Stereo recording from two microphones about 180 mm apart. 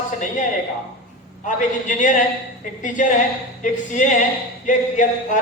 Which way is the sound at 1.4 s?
45° left (ahead or behind).